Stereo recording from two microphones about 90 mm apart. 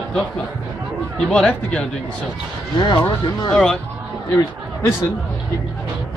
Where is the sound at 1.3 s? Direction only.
10° left (ahead or behind).